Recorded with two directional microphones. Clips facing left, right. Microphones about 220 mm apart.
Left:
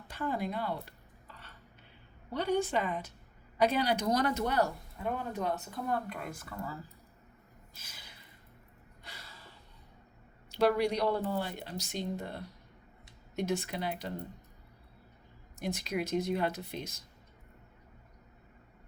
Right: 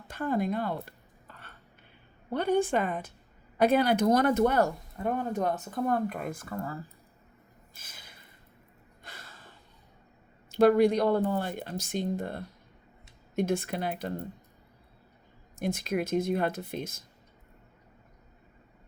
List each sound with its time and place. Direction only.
0.1 s a sound: 50° right (ahead or behind)
2.3 s speech: 55° right (ahead or behind)
7.7 s a sound: 50° right (ahead or behind)
9.0 s gasp: 50° right (ahead or behind)
10.5 s speech: 50° right (ahead or behind)
15.5 s speech: 50° right (ahead or behind)